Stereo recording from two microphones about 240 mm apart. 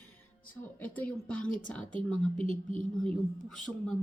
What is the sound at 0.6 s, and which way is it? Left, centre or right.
Speech, centre.